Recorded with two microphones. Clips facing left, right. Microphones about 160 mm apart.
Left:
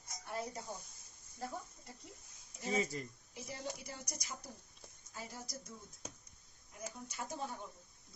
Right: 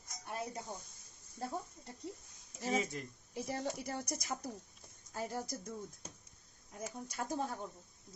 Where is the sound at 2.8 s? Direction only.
Centre (ahead or behind).